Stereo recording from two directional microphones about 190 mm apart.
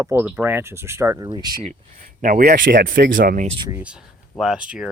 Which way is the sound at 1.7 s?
45° right (ahead or behind).